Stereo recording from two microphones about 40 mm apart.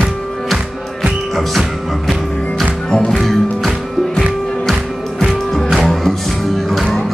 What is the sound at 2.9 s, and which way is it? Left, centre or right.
Music, centre.